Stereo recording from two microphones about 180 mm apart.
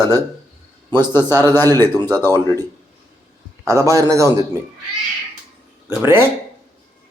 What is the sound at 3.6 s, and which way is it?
Speech, 15° right (ahead or behind).